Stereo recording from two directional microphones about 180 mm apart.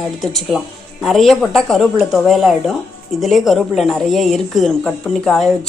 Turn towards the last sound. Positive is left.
turn(degrees=0)  # may be behind; listen again after turning